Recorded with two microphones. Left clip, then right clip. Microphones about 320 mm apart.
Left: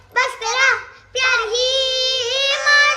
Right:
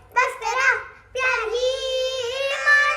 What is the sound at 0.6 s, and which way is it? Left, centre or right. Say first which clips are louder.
Child singing: left 3 dB; left.